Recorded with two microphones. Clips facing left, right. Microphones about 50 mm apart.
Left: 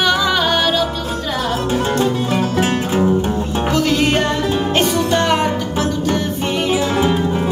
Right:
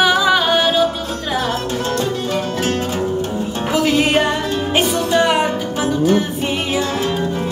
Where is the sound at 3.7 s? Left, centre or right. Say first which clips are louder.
Right 2 dB; centre.